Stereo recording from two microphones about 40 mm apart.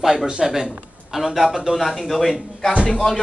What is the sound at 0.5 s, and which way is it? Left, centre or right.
A man's voice, centre.